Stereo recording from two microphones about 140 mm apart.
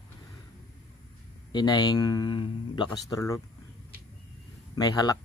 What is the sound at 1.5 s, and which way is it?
Speech, 30° left (ahead or behind).